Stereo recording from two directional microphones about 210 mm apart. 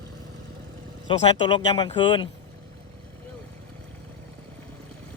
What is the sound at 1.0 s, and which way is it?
Speech, 25° left (ahead or behind).